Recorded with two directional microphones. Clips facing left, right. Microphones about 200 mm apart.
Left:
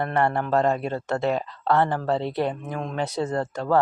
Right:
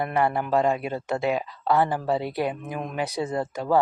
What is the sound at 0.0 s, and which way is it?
Speech, centre (ahead or behind).